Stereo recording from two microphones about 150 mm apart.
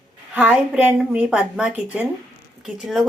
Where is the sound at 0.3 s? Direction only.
10° right (ahead or behind).